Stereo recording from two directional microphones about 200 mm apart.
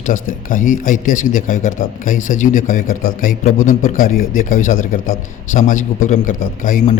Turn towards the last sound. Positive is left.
turn(degrees=40)  # may be behind; listen again after turning